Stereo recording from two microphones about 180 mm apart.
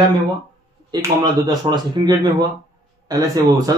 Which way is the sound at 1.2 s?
20° right (ahead or behind).